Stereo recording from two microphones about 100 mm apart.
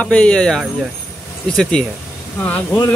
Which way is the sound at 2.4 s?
15° left (ahead or behind).